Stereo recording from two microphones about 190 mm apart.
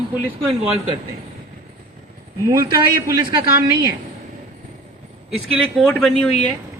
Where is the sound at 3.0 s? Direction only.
25° right (ahead or behind).